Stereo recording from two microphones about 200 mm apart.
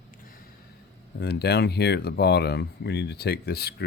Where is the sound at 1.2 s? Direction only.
55° left (ahead or behind).